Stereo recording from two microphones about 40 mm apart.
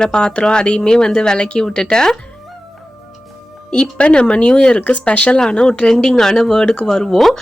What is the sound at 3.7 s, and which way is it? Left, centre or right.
Speech, left.